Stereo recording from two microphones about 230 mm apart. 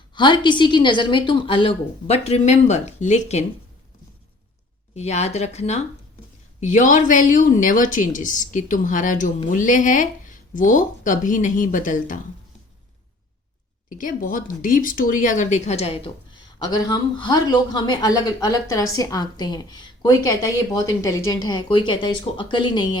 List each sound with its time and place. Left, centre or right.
0.1 s a woman's voice: centre
4.9 s a woman's voice: left
13.9 s speech: left; by 23.0 s centre